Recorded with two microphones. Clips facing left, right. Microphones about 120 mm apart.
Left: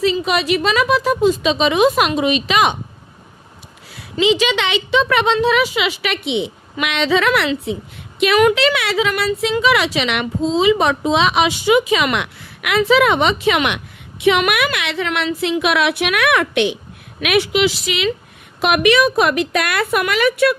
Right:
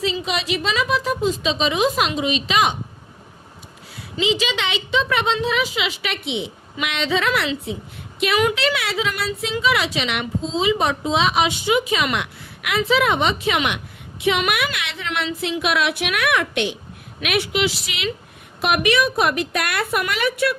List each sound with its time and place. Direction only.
0.0 s speech: 60° left (ahead or behind)
4.2 s a woman's voice: 70° left (ahead or behind)
17.2 s a woman's voice: 85° left